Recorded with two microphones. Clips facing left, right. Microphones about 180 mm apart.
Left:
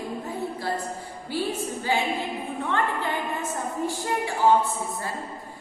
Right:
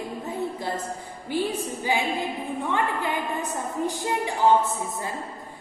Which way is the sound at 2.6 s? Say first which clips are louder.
Even; 15° right (ahead or behind).